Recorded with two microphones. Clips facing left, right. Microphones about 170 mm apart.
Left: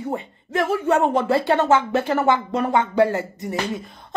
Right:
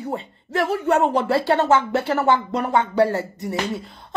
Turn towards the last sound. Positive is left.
turn(degrees=20)  # may be behind; listen again after turning